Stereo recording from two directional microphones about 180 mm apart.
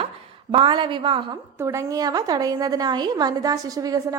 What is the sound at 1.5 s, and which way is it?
A woman's voice, 15° right (ahead or behind).